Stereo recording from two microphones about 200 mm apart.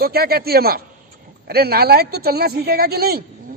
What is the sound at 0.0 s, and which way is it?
A man's voice, 50° right (ahead or behind).